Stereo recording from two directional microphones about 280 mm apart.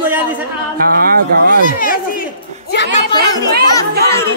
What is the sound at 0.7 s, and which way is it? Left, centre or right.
Speech, right.